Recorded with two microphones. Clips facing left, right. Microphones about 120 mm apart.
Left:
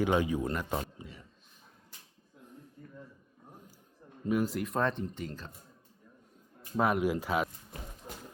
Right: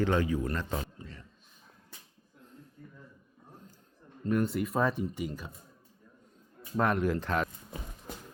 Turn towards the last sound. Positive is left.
turn(degrees=10)  # may be behind; listen again after turning